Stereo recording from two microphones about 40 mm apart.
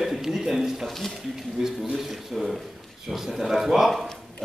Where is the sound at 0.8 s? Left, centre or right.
Centre.